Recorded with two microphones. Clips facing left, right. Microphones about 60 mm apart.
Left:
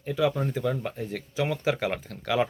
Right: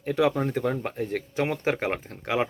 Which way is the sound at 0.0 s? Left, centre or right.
Right.